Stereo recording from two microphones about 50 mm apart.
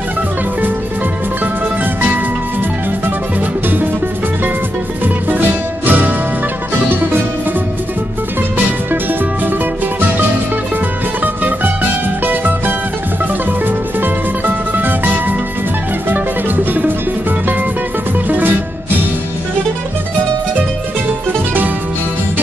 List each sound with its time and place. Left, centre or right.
5.9 s music: right
11.4 s music: right